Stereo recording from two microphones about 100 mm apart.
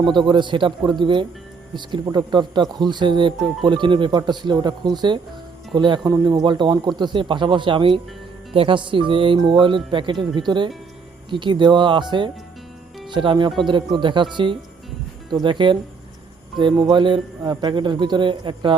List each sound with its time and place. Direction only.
0.3 s speech: 55° right (ahead or behind)
6.1 s speech: 40° right (ahead or behind); by 15.8 s 55° right (ahead or behind)
16.8 s speech: 55° right (ahead or behind)